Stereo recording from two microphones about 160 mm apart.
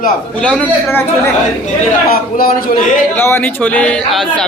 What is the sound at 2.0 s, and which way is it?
Speech, 65° left (ahead or behind).